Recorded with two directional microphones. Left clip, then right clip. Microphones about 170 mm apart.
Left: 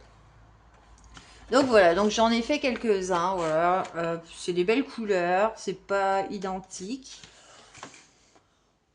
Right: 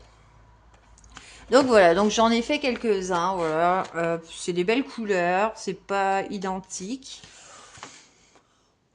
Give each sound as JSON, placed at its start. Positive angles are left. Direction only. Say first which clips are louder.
{"t": 1.1, "sound": "a woman's voice", "louder": "right 4 dB", "side_deg": -35}